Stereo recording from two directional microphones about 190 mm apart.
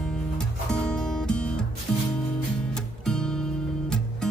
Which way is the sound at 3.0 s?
5° left (ahead or behind).